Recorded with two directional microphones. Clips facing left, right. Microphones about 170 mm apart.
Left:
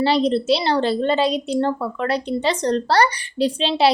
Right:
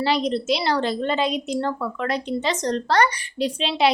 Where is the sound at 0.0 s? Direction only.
30° left (ahead or behind).